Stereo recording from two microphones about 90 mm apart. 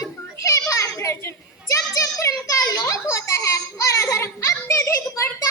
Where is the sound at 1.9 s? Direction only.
40° left (ahead or behind).